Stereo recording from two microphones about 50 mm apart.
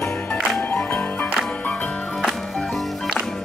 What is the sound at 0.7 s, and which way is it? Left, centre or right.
Music, left.